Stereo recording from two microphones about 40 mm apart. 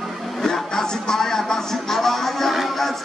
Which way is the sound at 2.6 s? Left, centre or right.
Centre.